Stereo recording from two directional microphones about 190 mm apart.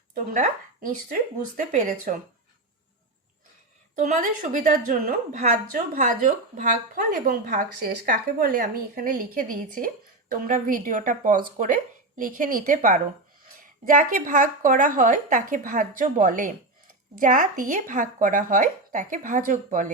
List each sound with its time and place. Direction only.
0.1 s a woman's voice: 45° right (ahead or behind)
3.9 s a woman's voice: 45° right (ahead or behind)